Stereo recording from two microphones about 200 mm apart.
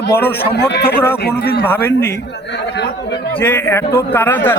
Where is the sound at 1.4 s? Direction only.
55° left (ahead or behind).